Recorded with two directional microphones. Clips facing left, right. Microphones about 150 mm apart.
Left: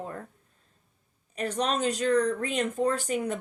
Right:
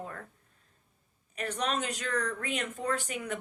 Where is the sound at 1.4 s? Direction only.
35° left (ahead or behind).